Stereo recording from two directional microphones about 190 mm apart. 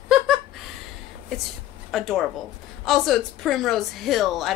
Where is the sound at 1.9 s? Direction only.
Centre (ahead or behind).